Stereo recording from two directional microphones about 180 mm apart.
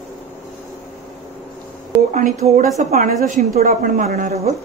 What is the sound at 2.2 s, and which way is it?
A woman's voice, 45° right (ahead or behind).